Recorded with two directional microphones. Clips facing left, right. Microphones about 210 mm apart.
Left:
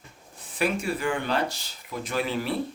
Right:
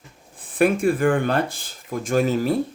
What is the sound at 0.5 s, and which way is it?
Speech, 50° right (ahead or behind).